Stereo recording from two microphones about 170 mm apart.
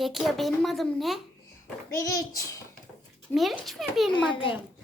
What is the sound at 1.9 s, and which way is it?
Speech, 20° left (ahead or behind).